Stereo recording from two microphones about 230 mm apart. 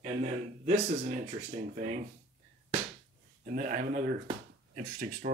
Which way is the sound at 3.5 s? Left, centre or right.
Right.